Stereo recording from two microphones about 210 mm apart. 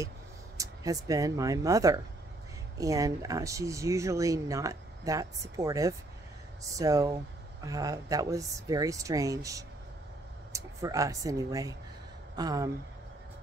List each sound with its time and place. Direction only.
0.6 s speech: 15° right (ahead or behind)